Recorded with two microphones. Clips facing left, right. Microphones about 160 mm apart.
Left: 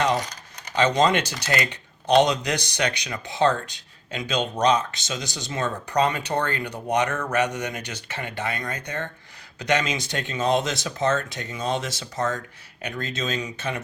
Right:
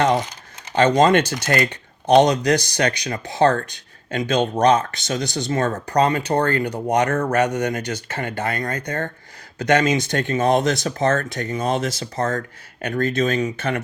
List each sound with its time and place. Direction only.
0.8 s speech: 50° right (ahead or behind)